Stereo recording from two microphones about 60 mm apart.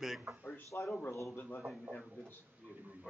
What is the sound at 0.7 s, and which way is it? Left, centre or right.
Speech, left.